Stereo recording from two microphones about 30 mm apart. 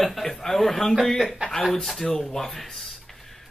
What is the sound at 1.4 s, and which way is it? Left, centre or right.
Speech, right.